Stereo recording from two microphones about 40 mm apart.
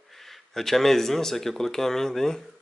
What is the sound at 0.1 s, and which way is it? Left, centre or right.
Speech, centre.